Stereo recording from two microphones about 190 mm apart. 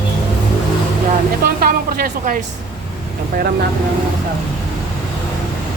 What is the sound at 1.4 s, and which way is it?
Speech, 50° right (ahead or behind).